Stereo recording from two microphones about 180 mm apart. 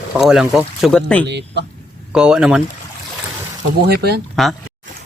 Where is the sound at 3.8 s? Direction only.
60° right (ahead or behind).